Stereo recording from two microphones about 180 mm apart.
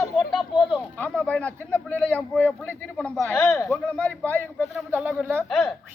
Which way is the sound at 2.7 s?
10° left (ahead or behind).